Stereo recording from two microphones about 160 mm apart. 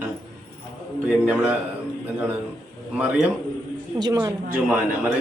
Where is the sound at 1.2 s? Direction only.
5° right (ahead or behind).